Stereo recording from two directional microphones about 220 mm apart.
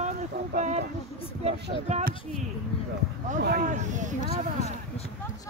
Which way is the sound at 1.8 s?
30° right (ahead or behind).